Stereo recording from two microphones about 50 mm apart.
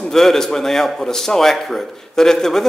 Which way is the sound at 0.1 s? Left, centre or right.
Centre.